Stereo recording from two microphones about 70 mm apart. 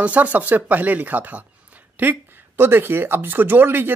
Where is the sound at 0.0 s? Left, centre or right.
Right.